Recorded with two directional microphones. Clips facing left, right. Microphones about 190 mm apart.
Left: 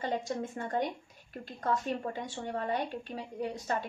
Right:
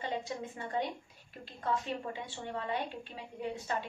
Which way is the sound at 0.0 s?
45° left (ahead or behind).